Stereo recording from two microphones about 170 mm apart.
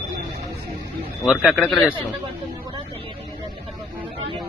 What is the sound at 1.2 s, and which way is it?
Speech, 5° right (ahead or behind).